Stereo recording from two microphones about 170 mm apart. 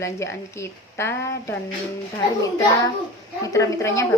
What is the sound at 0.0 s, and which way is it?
A woman's voice, 15° left (ahead or behind).